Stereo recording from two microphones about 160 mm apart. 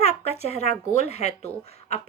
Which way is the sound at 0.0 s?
40° left (ahead or behind).